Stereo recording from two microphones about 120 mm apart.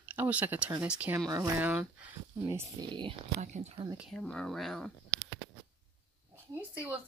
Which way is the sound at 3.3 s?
70° right (ahead or behind).